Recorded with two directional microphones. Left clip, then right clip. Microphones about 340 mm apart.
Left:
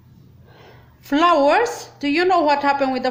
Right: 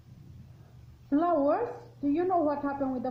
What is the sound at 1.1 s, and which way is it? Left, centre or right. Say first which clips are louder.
A woman's voice: left 11 dB; left.